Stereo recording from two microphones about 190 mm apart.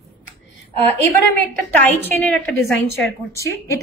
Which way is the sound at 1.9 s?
5° left (ahead or behind).